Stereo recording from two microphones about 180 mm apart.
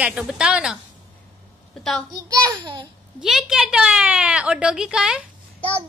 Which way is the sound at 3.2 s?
Centre (ahead or behind).